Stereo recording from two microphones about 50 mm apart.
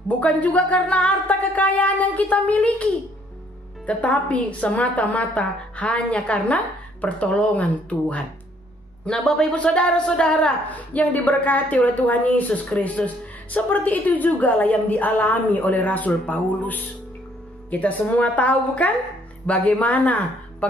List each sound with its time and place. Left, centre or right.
0.2 s a woman's voice: left
9.0 s a man's voice: centre
9.6 s a woman's voice: left
10.7 s a woman's voice: left